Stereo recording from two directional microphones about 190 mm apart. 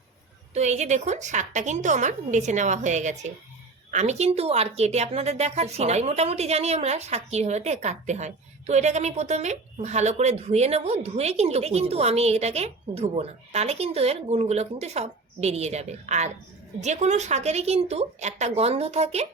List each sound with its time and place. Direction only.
0.5 s a woman's voice: 35° right (ahead or behind)